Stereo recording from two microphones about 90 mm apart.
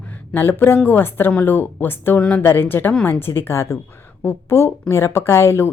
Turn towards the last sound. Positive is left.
turn(degrees=30)  # may be behind; listen again after turning